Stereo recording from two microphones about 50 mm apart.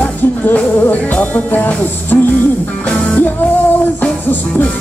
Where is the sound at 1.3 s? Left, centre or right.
Left.